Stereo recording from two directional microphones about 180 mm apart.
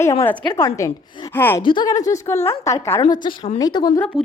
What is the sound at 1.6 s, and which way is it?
A woman's voice, 25° left (ahead or behind).